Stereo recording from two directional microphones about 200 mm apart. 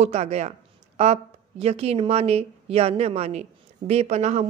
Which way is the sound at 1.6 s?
30° right (ahead or behind).